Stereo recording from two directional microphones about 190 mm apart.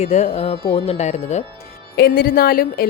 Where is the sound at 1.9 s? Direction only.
55° left (ahead or behind).